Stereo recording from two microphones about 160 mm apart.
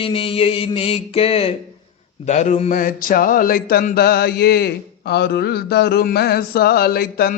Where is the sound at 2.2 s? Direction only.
45° left (ahead or behind).